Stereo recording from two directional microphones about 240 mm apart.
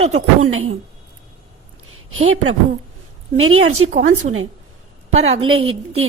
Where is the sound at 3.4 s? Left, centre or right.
Right.